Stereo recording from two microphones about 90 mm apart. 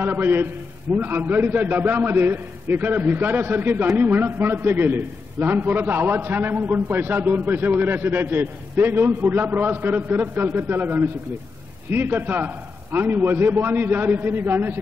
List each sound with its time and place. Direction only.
0.0 s a man's voice: 25° right (ahead or behind)